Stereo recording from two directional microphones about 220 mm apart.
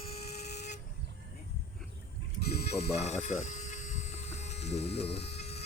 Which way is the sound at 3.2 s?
35° left (ahead or behind).